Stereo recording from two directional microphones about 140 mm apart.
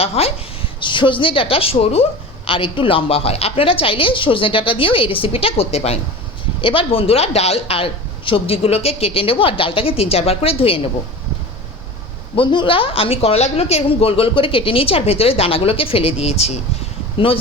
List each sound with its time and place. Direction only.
0.0 s a woman's voice: 45° left (ahead or behind)
0.8 s a woman's voice: 35° left (ahead or behind)
12.4 s a woman's voice: 35° left (ahead or behind)